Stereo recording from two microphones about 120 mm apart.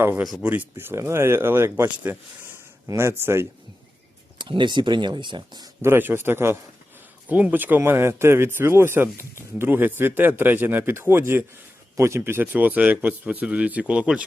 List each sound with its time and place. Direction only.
0.2 s speech: centre (ahead or behind)
0.4 s speech: 15° right (ahead or behind)
4.4 s speech: 40° right (ahead or behind)
5.8 s a man's voice: 20° right (ahead or behind)